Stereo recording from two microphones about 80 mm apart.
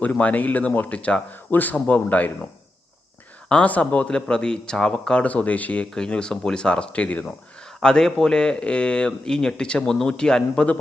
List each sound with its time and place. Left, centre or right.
0.0 s speech: centre
3.5 s speech: centre